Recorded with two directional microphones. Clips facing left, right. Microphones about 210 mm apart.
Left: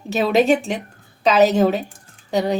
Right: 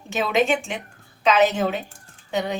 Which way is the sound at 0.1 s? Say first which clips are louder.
Left 5 dB; 35° left (ahead or behind).